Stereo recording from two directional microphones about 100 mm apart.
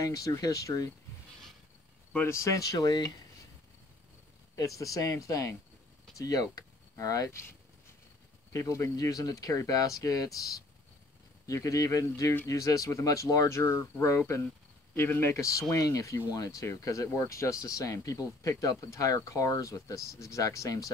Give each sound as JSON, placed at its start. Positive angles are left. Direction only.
{"t": 0.0, "sound": "speech", "side_deg": 35}
{"t": 2.1, "sound": "speech", "side_deg": 25}
{"t": 4.6, "sound": "speech", "side_deg": 35}
{"t": 8.5, "sound": "speech", "side_deg": 30}
{"t": 11.4, "sound": "speech", "side_deg": 35}